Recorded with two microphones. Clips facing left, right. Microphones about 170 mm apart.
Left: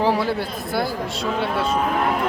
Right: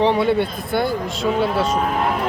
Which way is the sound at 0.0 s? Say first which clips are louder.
Right 4 dB; 5° left (ahead or behind).